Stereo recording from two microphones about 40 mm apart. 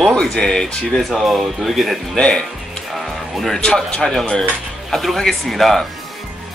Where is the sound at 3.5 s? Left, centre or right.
Centre.